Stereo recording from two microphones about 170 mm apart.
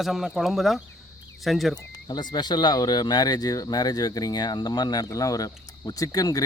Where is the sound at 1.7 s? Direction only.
25° left (ahead or behind).